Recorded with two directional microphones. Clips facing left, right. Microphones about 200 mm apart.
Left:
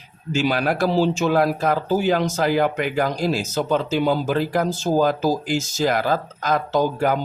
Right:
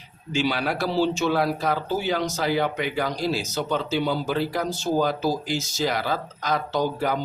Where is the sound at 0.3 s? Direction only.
45° left (ahead or behind).